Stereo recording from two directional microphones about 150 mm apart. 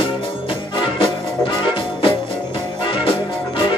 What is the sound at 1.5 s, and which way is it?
Music, 35° left (ahead or behind).